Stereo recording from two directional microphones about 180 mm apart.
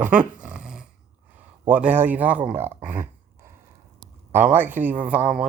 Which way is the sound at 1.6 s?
10° right (ahead or behind).